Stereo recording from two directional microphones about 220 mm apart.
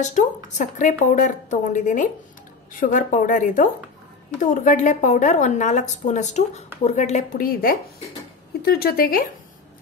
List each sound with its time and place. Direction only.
0.0 s a woman's voice: 35° left (ahead or behind)